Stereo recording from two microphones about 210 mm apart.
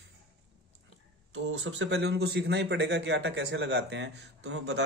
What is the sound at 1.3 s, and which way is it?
A man's voice, 65° right (ahead or behind).